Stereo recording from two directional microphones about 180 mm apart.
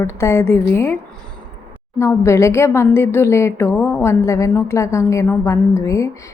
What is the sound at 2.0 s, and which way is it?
A woman's voice, 15° left (ahead or behind).